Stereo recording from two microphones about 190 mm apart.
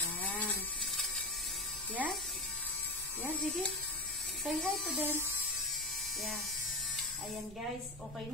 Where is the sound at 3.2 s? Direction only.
5° left (ahead or behind).